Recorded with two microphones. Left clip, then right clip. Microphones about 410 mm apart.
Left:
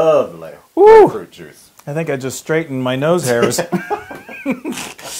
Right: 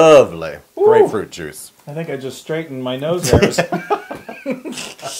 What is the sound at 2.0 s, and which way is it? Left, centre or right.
Speech, left.